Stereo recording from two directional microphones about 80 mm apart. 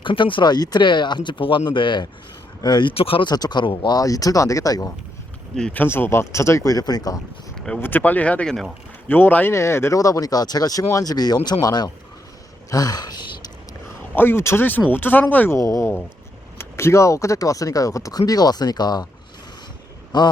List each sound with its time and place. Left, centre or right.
0.0 s speech: left
2.6 s speech: left
4.0 s speech: left
5.7 s speech: left
7.5 s a sound: centre
7.8 s speech: left
10.0 s speech: left
14.2 s speech: left
15.5 s speech: left
16.6 s speech: left
20.1 s speech: left